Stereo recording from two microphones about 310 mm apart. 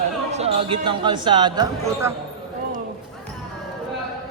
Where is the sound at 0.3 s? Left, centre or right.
Right.